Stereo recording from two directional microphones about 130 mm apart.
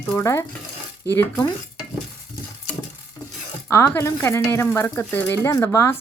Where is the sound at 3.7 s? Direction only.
20° left (ahead or behind).